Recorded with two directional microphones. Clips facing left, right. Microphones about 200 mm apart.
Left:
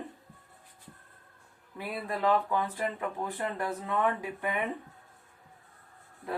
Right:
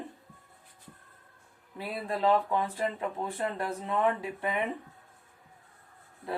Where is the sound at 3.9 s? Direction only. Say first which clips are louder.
Right 2 dB; 25° right (ahead or behind).